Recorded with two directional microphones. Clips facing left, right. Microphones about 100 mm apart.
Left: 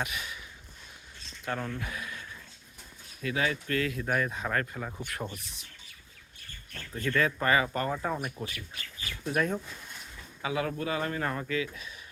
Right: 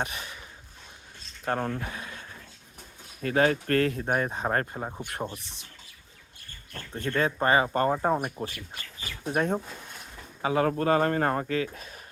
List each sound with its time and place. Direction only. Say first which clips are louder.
0.0 s a sound: right 2 dB; 35° right (ahead or behind)
1.5 s speech: right 5 dB; 40° right (ahead or behind)
3.2 s speech: right 7 dB; 45° right (ahead or behind)
6.9 s speech: right 1 dB; 30° right (ahead or behind)
10.4 s speech: right 7 dB; 45° right (ahead or behind)